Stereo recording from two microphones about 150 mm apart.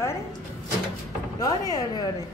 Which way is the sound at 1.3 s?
25° left (ahead or behind).